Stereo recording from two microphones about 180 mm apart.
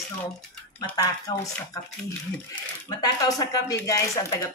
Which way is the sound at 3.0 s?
20° left (ahead or behind).